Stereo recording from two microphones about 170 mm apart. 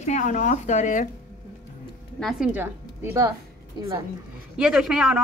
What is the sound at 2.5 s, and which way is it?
Speech, 10° right (ahead or behind).